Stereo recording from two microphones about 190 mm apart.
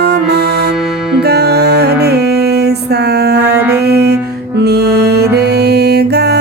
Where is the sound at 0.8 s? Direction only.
Centre (ahead or behind).